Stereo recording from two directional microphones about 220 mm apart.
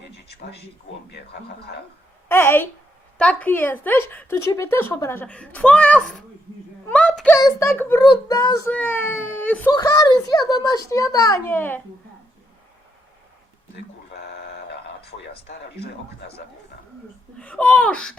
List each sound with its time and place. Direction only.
1.1 s speech: 50° left (ahead or behind)
2.3 s a woman's voice: 10° left (ahead or behind)
6.8 s a sound: 5° left (ahead or behind)
7.3 s a woman's voice: 15° left (ahead or behind)
15.0 s speech: 50° left (ahead or behind)
17.4 s speech: 5° left (ahead or behind)